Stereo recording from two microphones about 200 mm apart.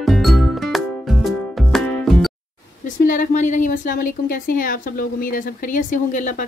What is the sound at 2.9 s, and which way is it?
A woman's voice, 40° left (ahead or behind).